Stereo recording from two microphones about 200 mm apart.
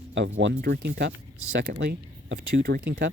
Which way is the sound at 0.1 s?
60° right (ahead or behind).